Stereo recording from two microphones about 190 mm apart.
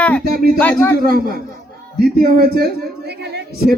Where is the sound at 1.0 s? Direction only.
50° right (ahead or behind).